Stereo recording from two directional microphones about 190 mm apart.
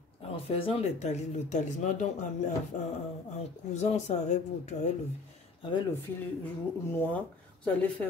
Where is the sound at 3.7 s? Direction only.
40° left (ahead or behind).